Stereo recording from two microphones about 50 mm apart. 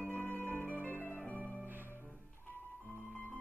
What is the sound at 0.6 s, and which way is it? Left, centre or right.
Music, right.